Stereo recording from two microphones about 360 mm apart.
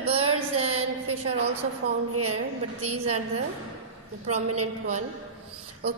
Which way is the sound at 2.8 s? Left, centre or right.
Centre.